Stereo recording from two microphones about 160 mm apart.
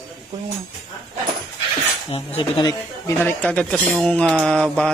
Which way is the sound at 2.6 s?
15° left (ahead or behind).